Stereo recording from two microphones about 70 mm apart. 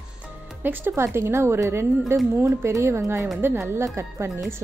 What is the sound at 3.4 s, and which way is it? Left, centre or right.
Speech, right.